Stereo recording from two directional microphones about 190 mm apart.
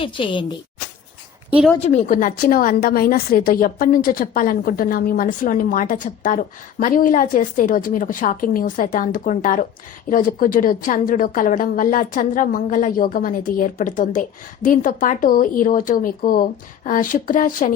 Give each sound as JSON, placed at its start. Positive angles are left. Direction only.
{"t": 0.0, "sound": "speech", "side_deg": 25}
{"t": 1.5, "sound": "speech", "side_deg": -5}
{"t": 1.8, "sound": "a woman's voice", "side_deg": 40}